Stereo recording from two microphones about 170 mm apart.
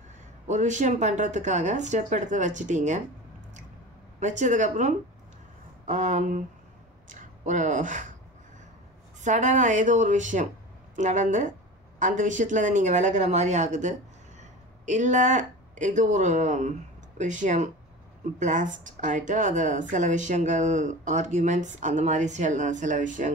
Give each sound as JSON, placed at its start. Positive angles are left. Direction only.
{"t": 0.5, "sound": "speech", "side_deg": -45}
{"t": 4.2, "sound": "speech", "side_deg": -45}
{"t": 9.2, "sound": "speech", "side_deg": -45}